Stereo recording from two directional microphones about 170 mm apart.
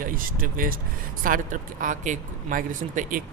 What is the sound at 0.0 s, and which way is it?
Speech, 55° right (ahead or behind).